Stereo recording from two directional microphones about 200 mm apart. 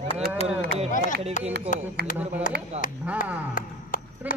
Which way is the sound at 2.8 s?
35° right (ahead or behind).